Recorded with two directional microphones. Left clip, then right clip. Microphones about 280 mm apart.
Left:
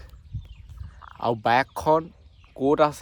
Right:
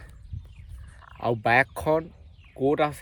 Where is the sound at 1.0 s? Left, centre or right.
Centre.